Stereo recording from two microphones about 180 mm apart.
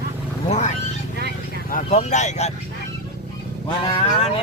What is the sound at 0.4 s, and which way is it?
Cat, 40° left (ahead or behind).